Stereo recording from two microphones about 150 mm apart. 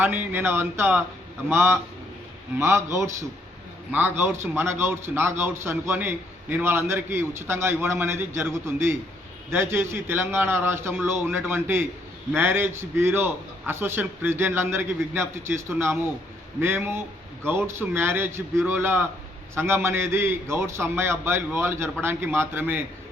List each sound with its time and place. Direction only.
0.0 s a man's voice: 15° right (ahead or behind)